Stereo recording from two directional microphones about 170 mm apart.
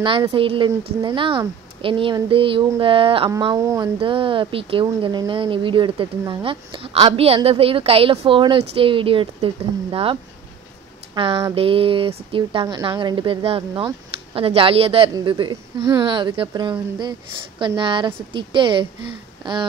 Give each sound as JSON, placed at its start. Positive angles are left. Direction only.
{"t": 0.0, "sound": "speech", "side_deg": -30}
{"t": 4.0, "sound": "speech", "side_deg": -30}
{"t": 11.1, "sound": "speech", "side_deg": -30}